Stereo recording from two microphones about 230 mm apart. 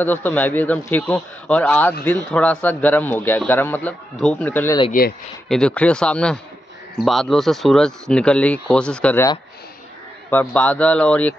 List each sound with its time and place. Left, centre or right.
0.0 s a man's voice: centre
5.0 s speech: left
5.5 s speech: centre
10.3 s a man's voice: centre